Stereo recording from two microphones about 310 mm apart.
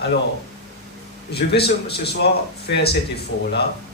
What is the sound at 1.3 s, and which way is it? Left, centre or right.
Speech, left.